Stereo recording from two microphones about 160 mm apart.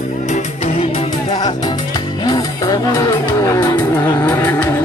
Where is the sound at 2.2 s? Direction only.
25° left (ahead or behind).